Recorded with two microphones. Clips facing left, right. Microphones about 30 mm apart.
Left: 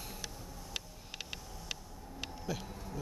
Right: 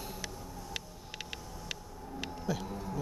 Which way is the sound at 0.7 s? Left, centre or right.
Centre.